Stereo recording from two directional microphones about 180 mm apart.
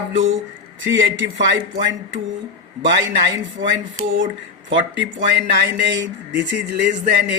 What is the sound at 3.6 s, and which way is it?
Speech, 90° right.